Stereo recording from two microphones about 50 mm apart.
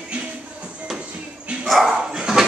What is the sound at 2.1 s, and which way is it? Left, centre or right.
Dog, centre.